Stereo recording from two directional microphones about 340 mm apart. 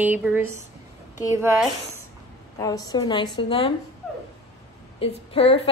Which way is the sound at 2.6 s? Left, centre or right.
Centre.